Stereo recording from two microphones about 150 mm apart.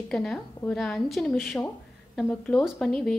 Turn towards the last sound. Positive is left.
turn(degrees=5)  # may be behind; listen again after turning